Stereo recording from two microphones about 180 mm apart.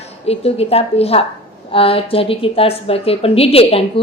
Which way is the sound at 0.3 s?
35° left (ahead or behind).